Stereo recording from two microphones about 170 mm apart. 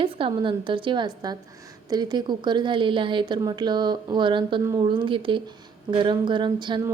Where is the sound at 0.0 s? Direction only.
30° right (ahead or behind).